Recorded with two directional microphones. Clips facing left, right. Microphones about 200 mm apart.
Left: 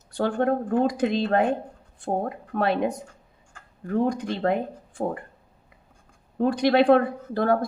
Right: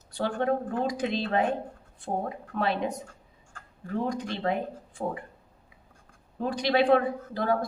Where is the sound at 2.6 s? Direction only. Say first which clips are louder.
Left 5 dB; 50° left (ahead or behind).